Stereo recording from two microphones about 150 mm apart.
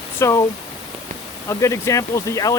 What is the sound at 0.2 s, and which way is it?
Speech, 20° left (ahead or behind).